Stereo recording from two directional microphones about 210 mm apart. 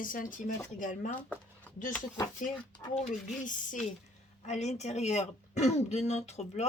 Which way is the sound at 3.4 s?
40° left (ahead or behind).